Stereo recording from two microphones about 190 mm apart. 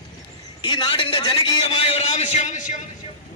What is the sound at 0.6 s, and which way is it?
A man's voice, 25° left (ahead or behind).